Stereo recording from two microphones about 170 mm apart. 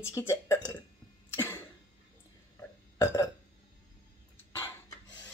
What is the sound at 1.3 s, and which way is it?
Cough, 15° left (ahead or behind).